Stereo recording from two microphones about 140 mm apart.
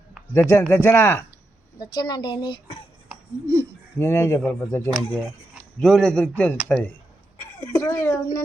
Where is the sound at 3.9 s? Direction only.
20° left (ahead or behind).